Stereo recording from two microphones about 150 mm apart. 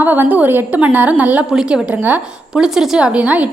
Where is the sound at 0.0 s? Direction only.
15° right (ahead or behind).